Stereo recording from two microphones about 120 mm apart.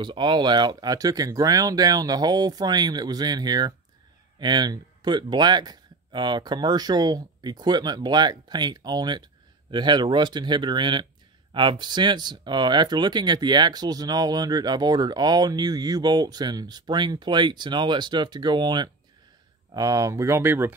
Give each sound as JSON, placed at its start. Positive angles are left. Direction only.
{"t": 0.0, "sound": "speech", "side_deg": -40}